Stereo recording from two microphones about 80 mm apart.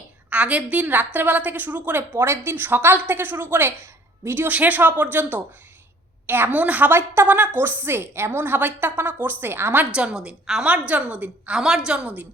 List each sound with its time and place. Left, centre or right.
0.3 s a woman's voice: centre
6.2 s a woman's voice: right
9.9 s a woman's voice: centre